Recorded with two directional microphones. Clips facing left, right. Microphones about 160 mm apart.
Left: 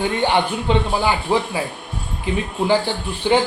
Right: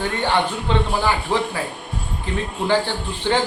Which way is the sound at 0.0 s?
15° left (ahead or behind).